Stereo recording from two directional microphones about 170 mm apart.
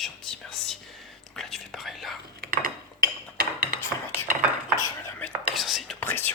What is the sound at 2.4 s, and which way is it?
Dishes, 55° right (ahead or behind).